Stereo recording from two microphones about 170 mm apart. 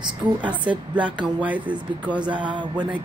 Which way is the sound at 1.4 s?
10° right (ahead or behind).